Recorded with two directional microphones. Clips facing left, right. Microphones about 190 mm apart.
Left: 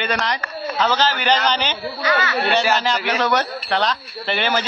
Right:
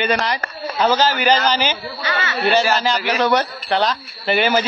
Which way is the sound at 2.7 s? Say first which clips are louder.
Right 2 dB; centre (ahead or behind).